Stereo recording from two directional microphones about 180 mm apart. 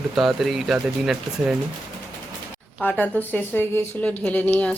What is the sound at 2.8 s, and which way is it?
Speech, 5° left (ahead or behind).